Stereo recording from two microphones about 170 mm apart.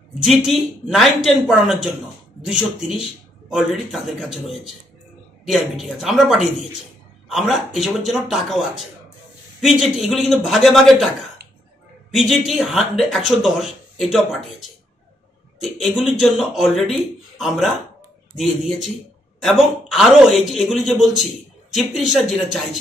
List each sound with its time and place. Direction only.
0.2 s speech: 5° right (ahead or behind)
12.1 s speech: centre (ahead or behind)